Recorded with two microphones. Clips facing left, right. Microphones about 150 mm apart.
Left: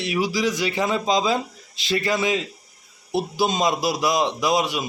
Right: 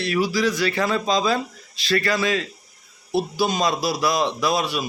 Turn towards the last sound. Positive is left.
turn(degrees=20)  # may be behind; listen again after turning